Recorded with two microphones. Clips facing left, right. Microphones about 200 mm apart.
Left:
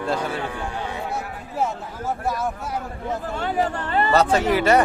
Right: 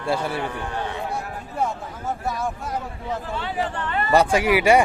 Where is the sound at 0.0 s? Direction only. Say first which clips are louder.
Even; 10° right (ahead or behind).